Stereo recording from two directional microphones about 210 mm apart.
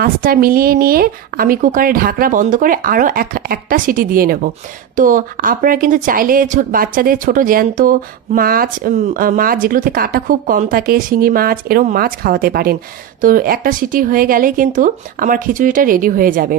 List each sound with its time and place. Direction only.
0.0 s speech: 45° right (ahead or behind)